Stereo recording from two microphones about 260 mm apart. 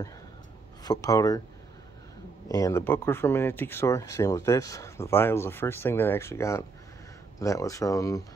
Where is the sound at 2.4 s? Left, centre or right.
Centre.